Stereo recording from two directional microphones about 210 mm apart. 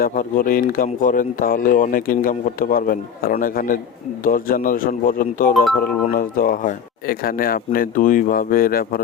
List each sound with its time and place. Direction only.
0.0 s speech: 40° left (ahead or behind)